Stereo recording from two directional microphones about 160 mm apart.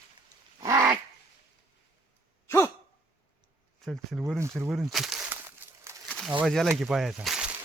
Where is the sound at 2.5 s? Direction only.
15° left (ahead or behind).